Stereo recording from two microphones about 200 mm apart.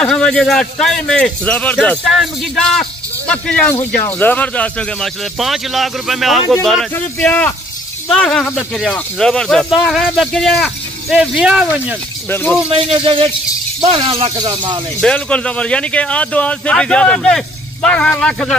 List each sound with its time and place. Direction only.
0.0 s speech: 5° left (ahead or behind)
12.3 s speech: 10° left (ahead or behind)
12.7 s speech: 25° right (ahead or behind)
15.0 s speech: 5° left (ahead or behind)